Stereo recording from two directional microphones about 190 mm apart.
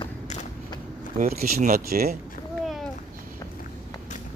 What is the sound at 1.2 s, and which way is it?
Speech, 45° right (ahead or behind).